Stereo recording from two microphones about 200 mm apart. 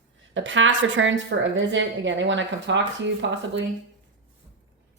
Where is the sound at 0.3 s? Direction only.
70° right (ahead or behind).